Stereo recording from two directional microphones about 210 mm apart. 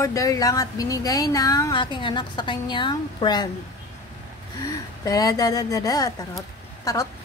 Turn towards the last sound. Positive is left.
turn(degrees=15)  # may be behind; listen again after turning